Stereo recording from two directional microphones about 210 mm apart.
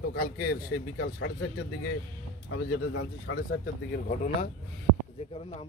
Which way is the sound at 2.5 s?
55° left (ahead or behind).